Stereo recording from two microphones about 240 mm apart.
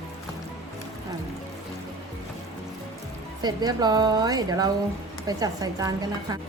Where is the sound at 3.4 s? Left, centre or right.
Centre.